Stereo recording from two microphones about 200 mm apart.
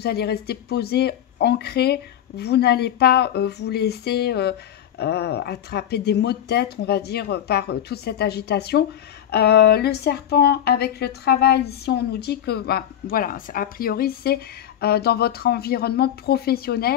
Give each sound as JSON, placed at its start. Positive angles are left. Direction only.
{"t": 0.0, "sound": "speech", "side_deg": 55}